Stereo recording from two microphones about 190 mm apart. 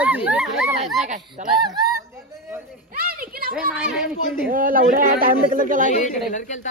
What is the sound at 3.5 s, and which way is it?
Speech, 5° right (ahead or behind).